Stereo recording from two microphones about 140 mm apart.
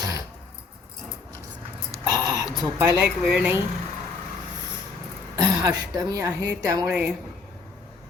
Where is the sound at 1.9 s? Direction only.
25° right (ahead or behind).